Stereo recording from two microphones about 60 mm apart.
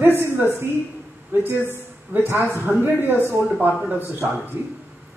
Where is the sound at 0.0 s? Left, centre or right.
Right.